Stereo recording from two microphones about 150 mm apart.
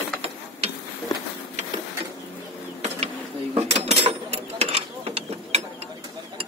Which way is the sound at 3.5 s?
45° right (ahead or behind).